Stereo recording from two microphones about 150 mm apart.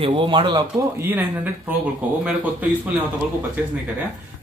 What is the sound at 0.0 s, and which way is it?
Speech, 35° right (ahead or behind).